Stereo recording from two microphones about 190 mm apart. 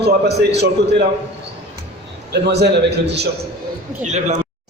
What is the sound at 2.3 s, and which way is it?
Speech, 60° right (ahead or behind).